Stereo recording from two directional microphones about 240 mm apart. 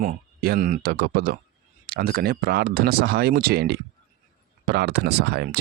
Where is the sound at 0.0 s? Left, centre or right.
Right.